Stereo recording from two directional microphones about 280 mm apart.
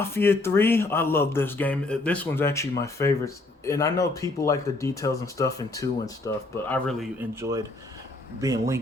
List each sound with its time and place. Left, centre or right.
0.0 s speech: centre